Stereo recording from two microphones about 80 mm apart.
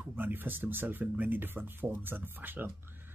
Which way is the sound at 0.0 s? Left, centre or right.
Right.